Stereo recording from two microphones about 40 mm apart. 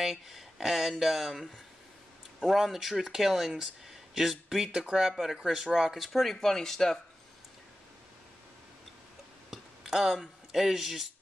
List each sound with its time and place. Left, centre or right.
0.0 s speech: centre
2.4 s speech: centre
5.1 s speech: centre
5.9 s speech: centre
9.5 s a sound: centre
10.5 s speech: centre